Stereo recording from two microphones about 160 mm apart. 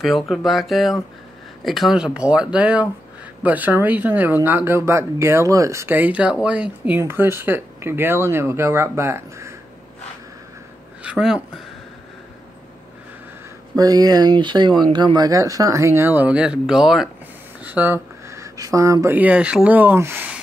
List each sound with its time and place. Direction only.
0.0 s speech: centre (ahead or behind); by 9.5 s 15° right (ahead or behind)
11.0 s speech: 5° right (ahead or behind)
13.7 s speech: 25° right (ahead or behind)